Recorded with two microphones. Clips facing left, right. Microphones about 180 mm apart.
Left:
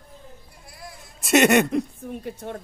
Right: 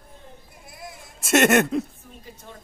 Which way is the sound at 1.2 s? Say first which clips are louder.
Left 1 dB; centre (ahead or behind).